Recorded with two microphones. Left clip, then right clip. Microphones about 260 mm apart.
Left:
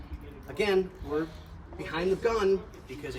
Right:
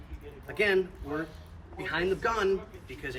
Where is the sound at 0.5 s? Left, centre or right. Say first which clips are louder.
Right 1 dB; centre.